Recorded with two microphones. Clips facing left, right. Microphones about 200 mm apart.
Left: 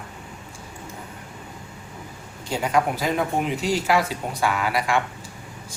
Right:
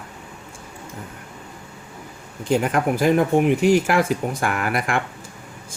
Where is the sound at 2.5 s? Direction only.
55° right (ahead or behind).